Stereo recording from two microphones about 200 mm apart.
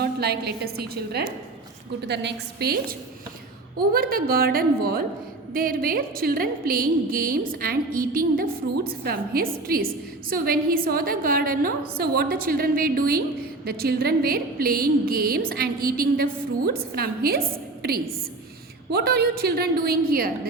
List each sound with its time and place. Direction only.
0.0 s a woman's voice: 55° right (ahead or behind)